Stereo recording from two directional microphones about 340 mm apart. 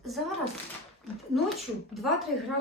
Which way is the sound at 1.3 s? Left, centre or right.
Centre.